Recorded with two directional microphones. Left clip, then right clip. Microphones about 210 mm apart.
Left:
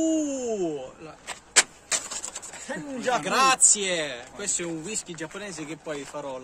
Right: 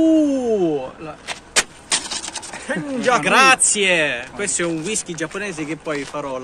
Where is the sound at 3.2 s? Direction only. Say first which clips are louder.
Right 7 dB; centre (ahead or behind).